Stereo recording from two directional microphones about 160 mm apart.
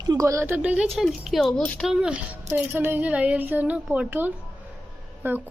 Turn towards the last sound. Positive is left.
turn(degrees=-15)  # may be behind; listen again after turning